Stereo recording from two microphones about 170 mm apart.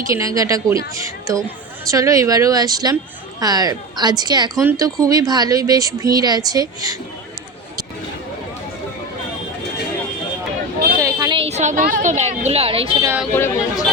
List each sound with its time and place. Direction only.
0.1 s speech: 20° right (ahead or behind)
11.0 s a woman's voice: 25° right (ahead or behind)
13.3 s speech: 15° left (ahead or behind)